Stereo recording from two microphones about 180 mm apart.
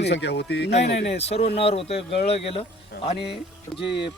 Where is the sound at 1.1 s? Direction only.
35° left (ahead or behind).